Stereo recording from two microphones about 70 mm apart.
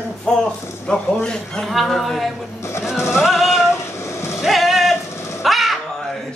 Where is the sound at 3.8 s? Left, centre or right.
Left.